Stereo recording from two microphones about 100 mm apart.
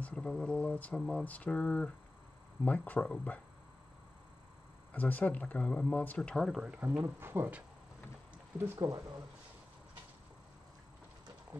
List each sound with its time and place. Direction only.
0.0 s speech: 10° left (ahead or behind)
4.9 s speech: 15° left (ahead or behind)
6.6 s speech: 15° right (ahead or behind); by 9.0 s 30° right (ahead or behind)